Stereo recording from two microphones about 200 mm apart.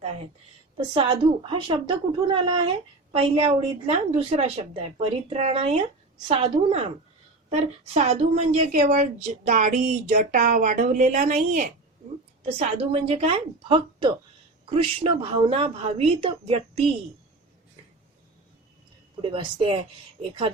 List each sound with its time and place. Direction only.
0.0 s a sound: 30° right (ahead or behind)
0.9 s a woman's voice: 25° right (ahead or behind)
19.2 s a woman's voice: 25° right (ahead or behind)